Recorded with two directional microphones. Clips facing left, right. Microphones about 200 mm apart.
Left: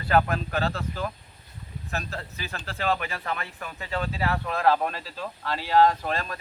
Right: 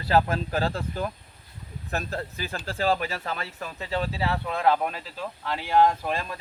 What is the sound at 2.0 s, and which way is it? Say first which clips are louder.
Speech: right 4 dB; 35° right (ahead or behind).